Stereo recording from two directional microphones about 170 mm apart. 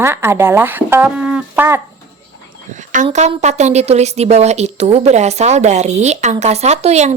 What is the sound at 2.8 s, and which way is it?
A woman's voice, 45° right (ahead or behind).